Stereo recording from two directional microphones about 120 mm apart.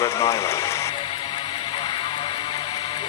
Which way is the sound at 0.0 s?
25° left (ahead or behind).